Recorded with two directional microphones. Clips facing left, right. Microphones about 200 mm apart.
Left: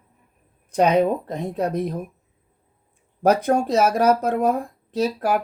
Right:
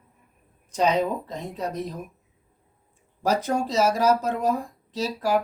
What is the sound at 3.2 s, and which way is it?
Speech, 55° left (ahead or behind).